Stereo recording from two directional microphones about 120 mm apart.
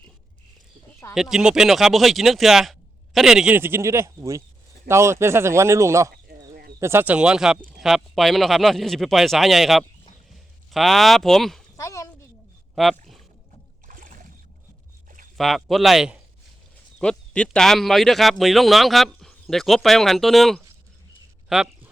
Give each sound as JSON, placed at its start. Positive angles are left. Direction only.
{"t": 1.1, "sound": "speech", "side_deg": -5}
{"t": 3.5, "sound": "speech", "side_deg": -20}
{"t": 11.8, "sound": "a sound", "side_deg": 25}
{"t": 12.7, "sound": "speech", "side_deg": 0}
{"t": 13.8, "sound": "boat", "side_deg": -90}
{"t": 15.4, "sound": "speech", "side_deg": 0}
{"t": 17.0, "sound": "speech", "side_deg": 10}